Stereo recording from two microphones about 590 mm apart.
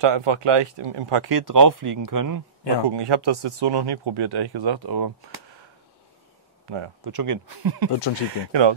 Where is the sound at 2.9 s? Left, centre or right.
Right.